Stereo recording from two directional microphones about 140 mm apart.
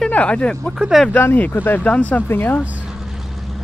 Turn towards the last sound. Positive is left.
turn(degrees=0)  # may be behind; listen again after turning